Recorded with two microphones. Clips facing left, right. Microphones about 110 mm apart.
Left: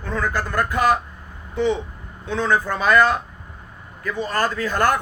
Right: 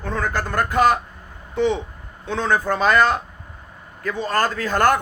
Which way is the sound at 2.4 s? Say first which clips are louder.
Right 1 dB; 30° right (ahead or behind).